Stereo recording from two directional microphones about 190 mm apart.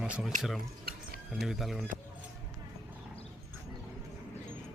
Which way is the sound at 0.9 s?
55° right (ahead or behind).